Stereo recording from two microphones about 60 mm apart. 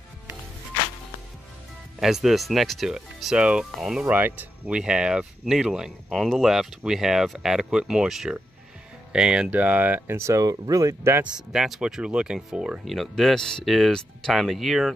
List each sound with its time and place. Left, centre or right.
2.0 s speech: centre
3.2 s speech: centre
4.1 s speech: right
4.7 s speech: centre
6.0 s speech: centre
6.9 s speech: centre
9.5 s speech: right
10.1 s speech: right
10.4 s speech: right
11.2 s speech: centre
12.8 s speech: centre